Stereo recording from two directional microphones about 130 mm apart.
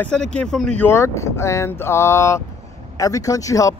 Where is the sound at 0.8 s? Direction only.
20° left (ahead or behind).